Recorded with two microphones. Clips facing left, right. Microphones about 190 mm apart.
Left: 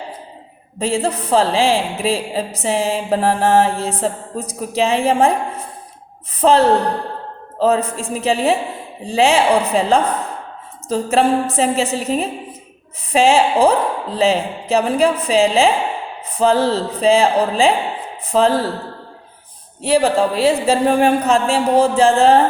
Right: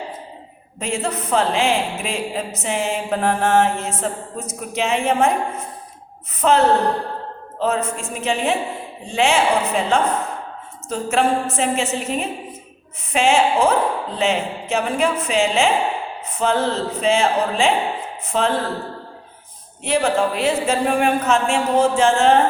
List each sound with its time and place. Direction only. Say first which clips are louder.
0.8 s a woman's voice: left 5 dB; 35° left (ahead or behind)
19.8 s a woman's voice: left 4 dB; 35° left (ahead or behind)